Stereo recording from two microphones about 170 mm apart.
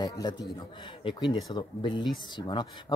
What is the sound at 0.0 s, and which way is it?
Speech, 25° left (ahead or behind).